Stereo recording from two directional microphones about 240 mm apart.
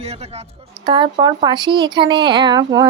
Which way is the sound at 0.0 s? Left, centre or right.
Right.